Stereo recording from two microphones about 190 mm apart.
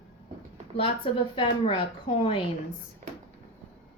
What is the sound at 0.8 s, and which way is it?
A woman's voice, 30° left (ahead or behind).